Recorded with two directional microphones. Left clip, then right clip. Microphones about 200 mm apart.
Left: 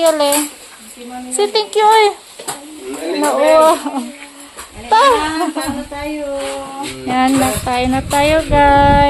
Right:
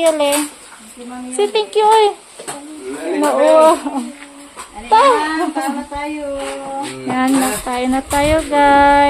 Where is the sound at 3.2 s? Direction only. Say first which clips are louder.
Even; 10° right (ahead or behind).